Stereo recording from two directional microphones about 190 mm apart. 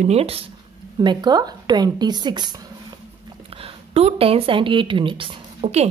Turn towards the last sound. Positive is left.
turn(degrees=-35)  # may be behind; listen again after turning